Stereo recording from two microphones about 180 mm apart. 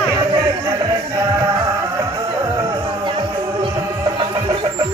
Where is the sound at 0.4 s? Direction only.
20° right (ahead or behind).